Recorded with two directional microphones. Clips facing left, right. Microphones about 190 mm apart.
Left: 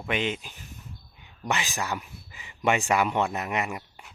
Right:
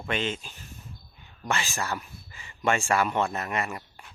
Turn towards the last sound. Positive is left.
turn(degrees=15)  # may be behind; listen again after turning